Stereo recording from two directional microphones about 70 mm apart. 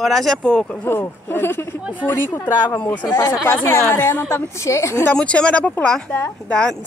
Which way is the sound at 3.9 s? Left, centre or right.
Left.